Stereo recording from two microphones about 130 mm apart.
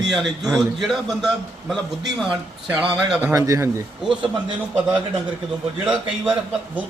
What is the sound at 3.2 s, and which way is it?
Speech, 20° right (ahead or behind).